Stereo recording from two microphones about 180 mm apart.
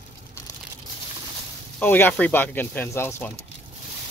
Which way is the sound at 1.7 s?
10° left (ahead or behind).